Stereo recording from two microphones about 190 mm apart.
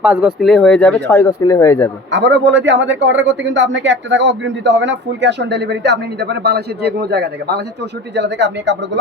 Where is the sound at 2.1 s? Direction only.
70° right (ahead or behind).